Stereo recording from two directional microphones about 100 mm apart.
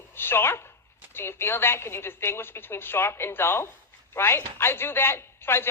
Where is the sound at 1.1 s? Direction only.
25° left (ahead or behind).